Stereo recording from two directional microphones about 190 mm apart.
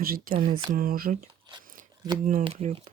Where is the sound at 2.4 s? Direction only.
35° right (ahead or behind).